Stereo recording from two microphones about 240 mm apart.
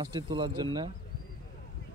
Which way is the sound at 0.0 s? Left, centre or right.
Centre.